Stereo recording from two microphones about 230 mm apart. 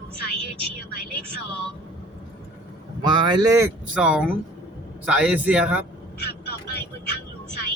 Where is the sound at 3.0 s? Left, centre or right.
Centre.